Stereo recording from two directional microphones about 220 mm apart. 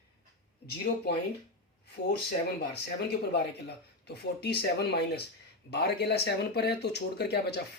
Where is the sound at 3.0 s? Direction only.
50° left (ahead or behind).